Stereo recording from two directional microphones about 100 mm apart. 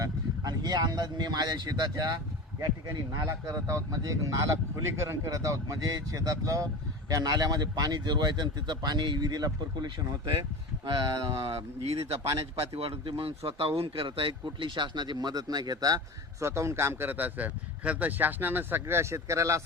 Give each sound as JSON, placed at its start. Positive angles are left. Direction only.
{"t": 0.0, "sound": "speech", "side_deg": -40}
{"t": 3.2, "sound": "speech", "side_deg": -30}
{"t": 10.8, "sound": "speech", "side_deg": -50}
{"t": 16.4, "sound": "a man's voice", "side_deg": -30}